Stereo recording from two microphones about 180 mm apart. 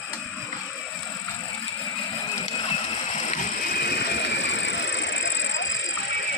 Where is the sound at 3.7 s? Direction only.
60° left (ahead or behind); by 5.9 s 90° left.